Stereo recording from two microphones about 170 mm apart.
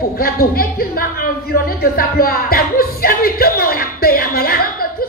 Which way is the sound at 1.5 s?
60° left (ahead or behind).